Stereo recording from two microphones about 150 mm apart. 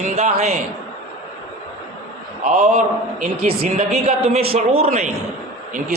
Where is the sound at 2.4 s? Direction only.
55° right (ahead or behind).